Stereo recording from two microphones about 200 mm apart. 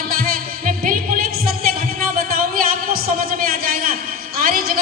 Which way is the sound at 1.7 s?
45° right (ahead or behind).